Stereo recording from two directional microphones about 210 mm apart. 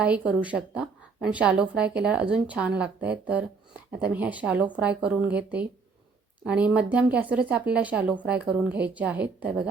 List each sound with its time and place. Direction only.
0.0 s a woman's voice: 5° right (ahead or behind)